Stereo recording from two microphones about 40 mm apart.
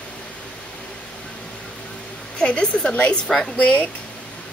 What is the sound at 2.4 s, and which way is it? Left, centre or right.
Speech, centre.